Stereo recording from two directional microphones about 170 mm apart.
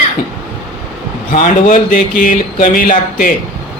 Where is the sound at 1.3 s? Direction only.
50° left (ahead or behind).